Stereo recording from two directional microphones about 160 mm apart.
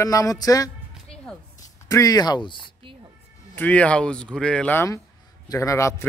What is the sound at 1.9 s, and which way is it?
Speech, 20° left (ahead or behind).